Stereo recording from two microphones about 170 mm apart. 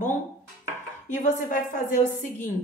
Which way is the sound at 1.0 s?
50° left (ahead or behind).